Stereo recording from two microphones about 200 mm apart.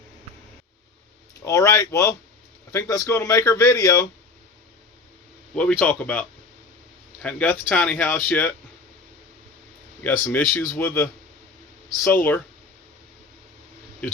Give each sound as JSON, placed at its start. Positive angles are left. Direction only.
{"t": 1.5, "sound": "speech", "side_deg": 15}
{"t": 5.5, "sound": "speech", "side_deg": 5}
{"t": 10.0, "sound": "speech", "side_deg": 10}